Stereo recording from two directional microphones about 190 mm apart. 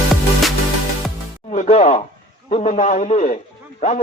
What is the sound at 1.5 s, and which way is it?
Music, 40° left (ahead or behind).